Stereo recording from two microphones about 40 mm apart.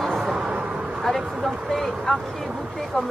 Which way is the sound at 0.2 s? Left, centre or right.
Centre.